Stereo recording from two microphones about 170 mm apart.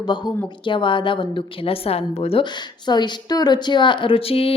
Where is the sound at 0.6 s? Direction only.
30° left (ahead or behind).